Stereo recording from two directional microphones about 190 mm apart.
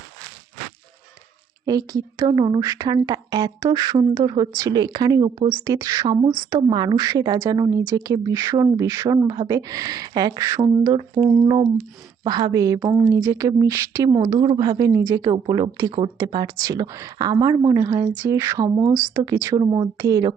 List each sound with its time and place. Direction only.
1.6 s speech: 20° right (ahead or behind)